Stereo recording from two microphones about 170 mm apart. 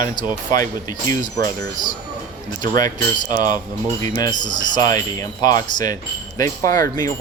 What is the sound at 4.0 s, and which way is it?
Speech, 25° left (ahead or behind).